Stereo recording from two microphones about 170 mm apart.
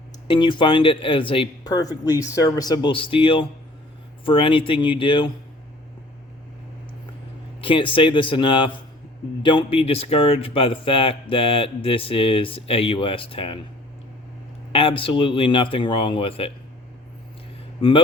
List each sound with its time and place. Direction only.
0.3 s a man's voice: 25° left (ahead or behind)
7.6 s a man's voice: 30° left (ahead or behind)
14.7 s speech: 30° left (ahead or behind)
17.7 s speech: 30° left (ahead or behind)